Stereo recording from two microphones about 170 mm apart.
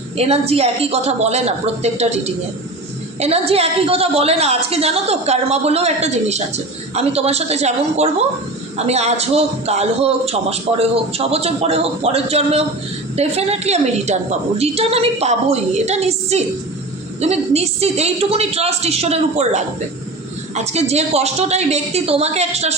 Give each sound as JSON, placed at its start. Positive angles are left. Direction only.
{"t": 0.2, "sound": "a man's voice", "side_deg": -35}